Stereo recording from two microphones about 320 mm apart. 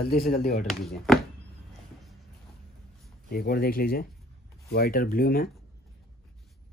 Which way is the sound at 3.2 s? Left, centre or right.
Left.